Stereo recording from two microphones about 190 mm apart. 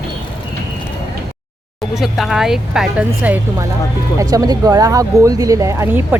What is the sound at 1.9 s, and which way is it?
Speech, centre (ahead or behind).